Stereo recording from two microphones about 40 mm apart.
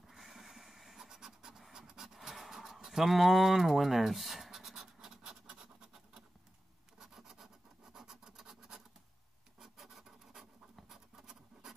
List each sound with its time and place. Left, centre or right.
0.2 s scratch: centre
1.7 s pant: centre
2.1 s a sound: centre
5.0 s scratch: centre
7.0 s rub: centre
9.6 s scratch: centre